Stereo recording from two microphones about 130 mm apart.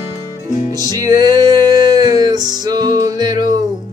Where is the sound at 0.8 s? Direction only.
30° right (ahead or behind).